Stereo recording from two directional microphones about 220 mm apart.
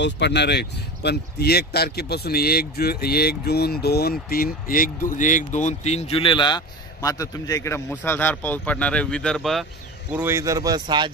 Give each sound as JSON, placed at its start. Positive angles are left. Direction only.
{"t": 0.0, "sound": "speech", "side_deg": 50}
{"t": 10.1, "sound": "speech", "side_deg": -10}